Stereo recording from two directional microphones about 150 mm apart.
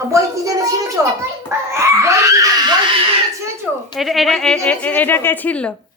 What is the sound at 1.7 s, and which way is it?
Screaming, 20° right (ahead or behind).